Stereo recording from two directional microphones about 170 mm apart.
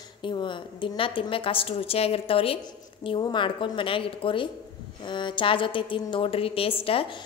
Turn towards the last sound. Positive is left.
turn(degrees=35)  # may be behind; listen again after turning